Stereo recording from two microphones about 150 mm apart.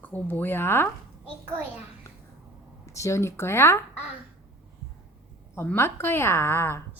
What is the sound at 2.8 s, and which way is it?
Speech, 20° left (ahead or behind).